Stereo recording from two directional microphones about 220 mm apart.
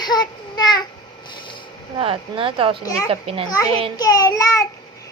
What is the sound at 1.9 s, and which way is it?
A woman's voice, 25° right (ahead or behind).